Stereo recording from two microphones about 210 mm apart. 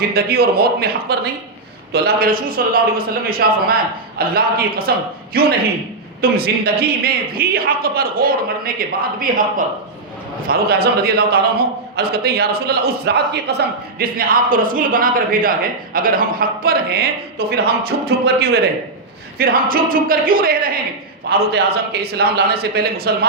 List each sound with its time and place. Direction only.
0.1 s a man's voice: 45° right (ahead or behind)